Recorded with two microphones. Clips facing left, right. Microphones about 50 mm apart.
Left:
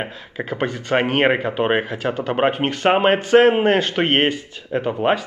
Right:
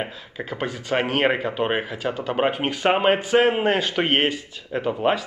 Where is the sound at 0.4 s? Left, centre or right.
Left.